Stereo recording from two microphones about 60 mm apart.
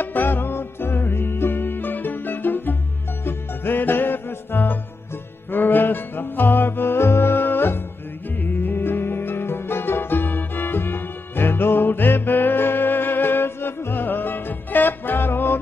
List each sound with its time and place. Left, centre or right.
0.0 s music: left